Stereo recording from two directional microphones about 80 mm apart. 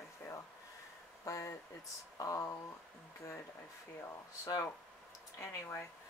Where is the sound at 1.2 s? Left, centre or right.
Left.